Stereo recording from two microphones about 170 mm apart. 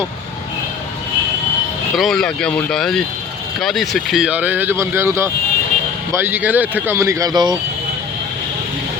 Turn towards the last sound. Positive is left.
turn(degrees=-25)  # may be behind; listen again after turning